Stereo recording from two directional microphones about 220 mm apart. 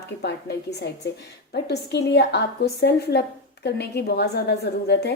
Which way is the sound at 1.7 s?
50° left (ahead or behind).